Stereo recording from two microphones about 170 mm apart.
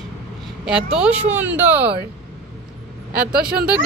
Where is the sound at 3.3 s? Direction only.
65° right (ahead or behind).